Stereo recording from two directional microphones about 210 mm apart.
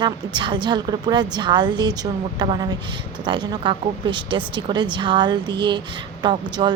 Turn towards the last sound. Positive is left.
turn(degrees=-20)  # may be behind; listen again after turning